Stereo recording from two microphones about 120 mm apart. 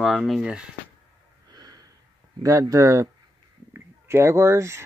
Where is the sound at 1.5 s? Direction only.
30° right (ahead or behind).